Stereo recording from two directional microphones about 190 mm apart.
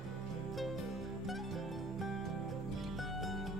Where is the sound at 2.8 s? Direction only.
Centre (ahead or behind).